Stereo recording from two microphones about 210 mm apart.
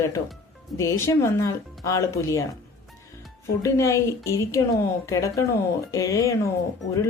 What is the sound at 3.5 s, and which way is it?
Speech, 15° left (ahead or behind).